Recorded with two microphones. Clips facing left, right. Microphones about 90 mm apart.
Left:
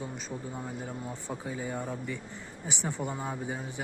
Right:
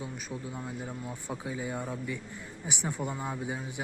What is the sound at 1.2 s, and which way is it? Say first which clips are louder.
Speech: right 1 dB; 10° right (ahead or behind).